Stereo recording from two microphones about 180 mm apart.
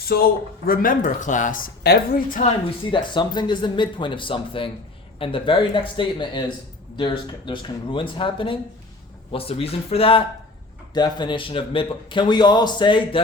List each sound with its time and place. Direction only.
0.0 s speech: 55° left (ahead or behind)
2.6 s a man's voice: 25° left (ahead or behind)